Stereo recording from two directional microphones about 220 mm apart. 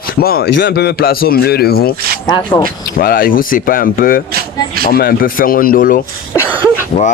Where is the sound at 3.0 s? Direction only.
40° left (ahead or behind).